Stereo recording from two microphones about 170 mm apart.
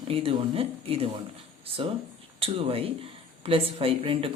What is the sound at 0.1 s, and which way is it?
Speech, 35° right (ahead or behind).